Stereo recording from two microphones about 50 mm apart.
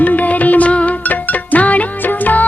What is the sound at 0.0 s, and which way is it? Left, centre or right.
Music, left.